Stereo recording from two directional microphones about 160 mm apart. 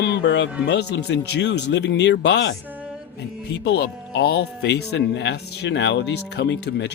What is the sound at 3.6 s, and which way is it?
Speech, 90° left.